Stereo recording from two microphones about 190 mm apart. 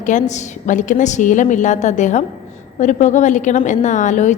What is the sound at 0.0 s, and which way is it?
A woman's voice, 40° left (ahead or behind).